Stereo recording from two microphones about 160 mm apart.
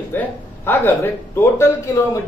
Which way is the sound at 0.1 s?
15° left (ahead or behind).